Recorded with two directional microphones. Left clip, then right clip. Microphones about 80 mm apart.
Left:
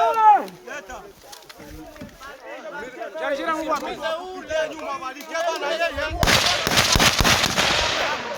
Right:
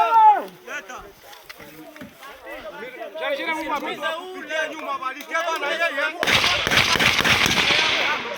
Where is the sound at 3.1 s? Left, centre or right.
Left.